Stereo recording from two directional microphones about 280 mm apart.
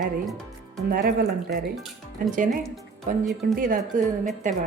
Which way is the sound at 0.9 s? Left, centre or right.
Right.